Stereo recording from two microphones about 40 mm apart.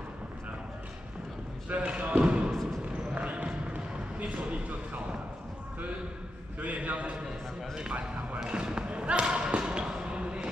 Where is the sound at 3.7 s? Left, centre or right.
Right.